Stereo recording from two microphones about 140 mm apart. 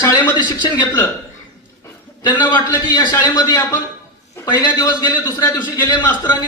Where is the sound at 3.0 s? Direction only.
25° left (ahead or behind).